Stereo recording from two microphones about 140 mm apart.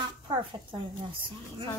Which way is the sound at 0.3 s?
35° right (ahead or behind).